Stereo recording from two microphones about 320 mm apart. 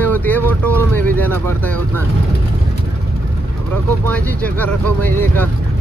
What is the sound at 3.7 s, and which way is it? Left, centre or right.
Speech, centre.